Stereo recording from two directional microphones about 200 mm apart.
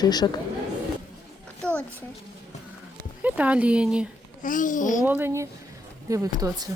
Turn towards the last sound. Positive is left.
turn(degrees=-20)  # may be behind; listen again after turning